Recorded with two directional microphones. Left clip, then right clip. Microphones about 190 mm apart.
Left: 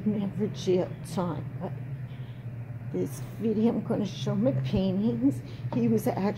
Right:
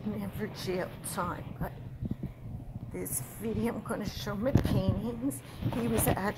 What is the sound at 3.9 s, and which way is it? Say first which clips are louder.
A woman's voice: left 5 dB; 10° right (ahead or behind).